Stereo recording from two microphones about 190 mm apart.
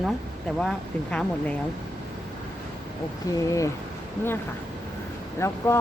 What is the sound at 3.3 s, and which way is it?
Speech, 15° left (ahead or behind).